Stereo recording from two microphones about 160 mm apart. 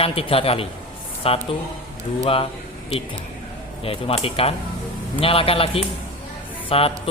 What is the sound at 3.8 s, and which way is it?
A man's voice, 35° left (ahead or behind).